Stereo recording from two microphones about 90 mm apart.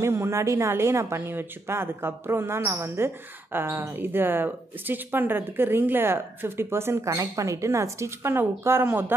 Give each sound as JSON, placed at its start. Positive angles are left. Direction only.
{"t": 0.0, "sound": "speech", "side_deg": -30}